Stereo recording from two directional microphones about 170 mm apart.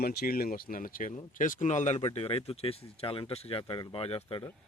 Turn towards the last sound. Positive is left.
turn(degrees=35)  # may be behind; listen again after turning